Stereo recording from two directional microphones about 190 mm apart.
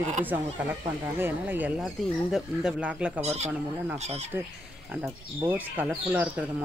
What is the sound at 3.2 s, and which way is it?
Speech, 35° right (ahead or behind).